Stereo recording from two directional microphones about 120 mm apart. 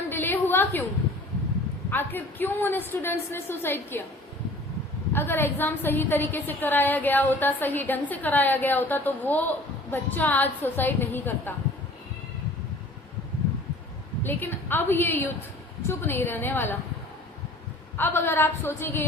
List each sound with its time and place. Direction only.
0.1 s a sound: 15° left (ahead or behind)
1.9 s a woman's voice: 15° left (ahead or behind)
5.1 s a woman's voice: 20° left (ahead or behind)
14.3 s a woman's voice: 15° left (ahead or behind)
17.9 s a woman's voice: 20° left (ahead or behind)